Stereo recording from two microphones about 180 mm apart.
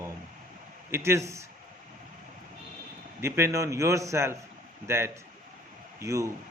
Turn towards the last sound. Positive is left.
turn(degrees=-15)  # may be behind; listen again after turning